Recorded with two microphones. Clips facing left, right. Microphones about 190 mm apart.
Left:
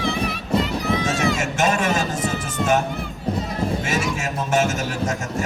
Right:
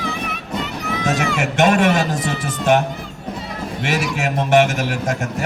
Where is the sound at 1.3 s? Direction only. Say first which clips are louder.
Right 5 dB; 60° right (ahead or behind).